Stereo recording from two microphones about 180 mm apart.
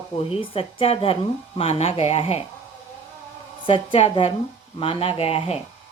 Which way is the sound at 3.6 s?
30° left (ahead or behind).